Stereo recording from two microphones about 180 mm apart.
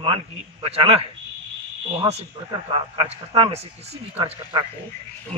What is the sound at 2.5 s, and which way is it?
A man's voice, 30° right (ahead or behind).